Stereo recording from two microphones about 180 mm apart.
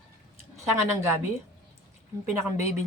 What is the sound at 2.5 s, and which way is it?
Speech, 40° left (ahead or behind).